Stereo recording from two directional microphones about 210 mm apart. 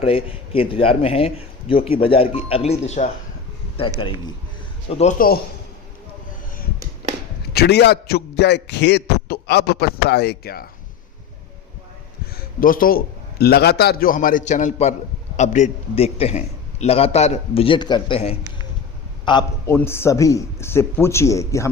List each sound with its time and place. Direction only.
0.0 s speech: 25° left (ahead or behind)
4.9 s a man's voice: 40° left (ahead or behind)
7.5 s a man's voice: 50° left (ahead or behind)
12.5 s a man's voice: 40° left (ahead or behind); by 21.7 s 15° left (ahead or behind)